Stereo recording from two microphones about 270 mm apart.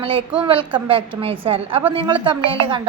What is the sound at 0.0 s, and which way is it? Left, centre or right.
A woman's voice, centre.